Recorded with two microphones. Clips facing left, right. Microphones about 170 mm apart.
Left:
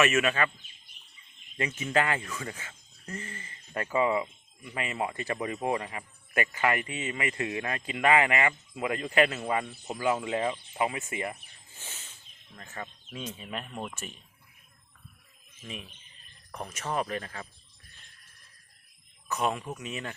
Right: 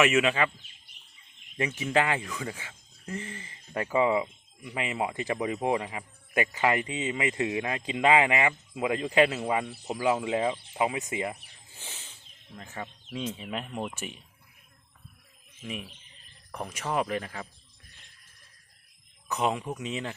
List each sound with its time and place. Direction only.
0.0 s speech: 15° right (ahead or behind)
1.5 s speech: 10° right (ahead or behind)
13.1 s speech: 20° right (ahead or behind)
13.5 s speech: 5° right (ahead or behind)
15.6 s speech: 15° right (ahead or behind)
19.3 s speech: 15° right (ahead or behind)